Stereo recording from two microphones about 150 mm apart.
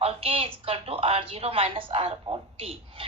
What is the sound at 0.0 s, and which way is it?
A woman's voice, 40° right (ahead or behind).